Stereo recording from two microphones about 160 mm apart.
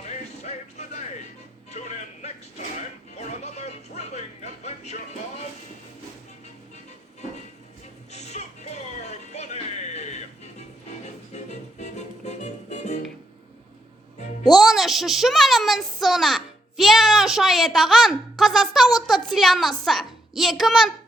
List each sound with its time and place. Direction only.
0.0 s music: 45° left (ahead or behind)
8.1 s music: 45° left (ahead or behind)
14.4 s a child's voice: centre (ahead or behind)